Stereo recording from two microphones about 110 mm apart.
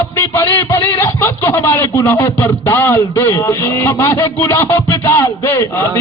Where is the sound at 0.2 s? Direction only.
25° left (ahead or behind).